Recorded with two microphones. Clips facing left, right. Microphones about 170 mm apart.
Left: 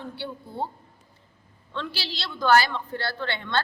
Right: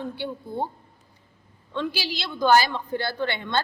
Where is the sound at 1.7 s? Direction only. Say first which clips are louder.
Right 5 dB; 15° right (ahead or behind).